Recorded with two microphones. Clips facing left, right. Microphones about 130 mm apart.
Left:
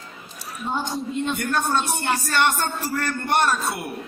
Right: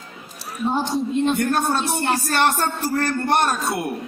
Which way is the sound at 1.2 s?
35° right (ahead or behind).